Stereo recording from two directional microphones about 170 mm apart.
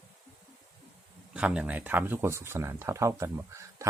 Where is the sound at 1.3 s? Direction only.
5° right (ahead or behind).